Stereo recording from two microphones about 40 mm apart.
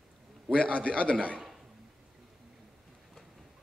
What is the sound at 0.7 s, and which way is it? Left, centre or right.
Speech, left.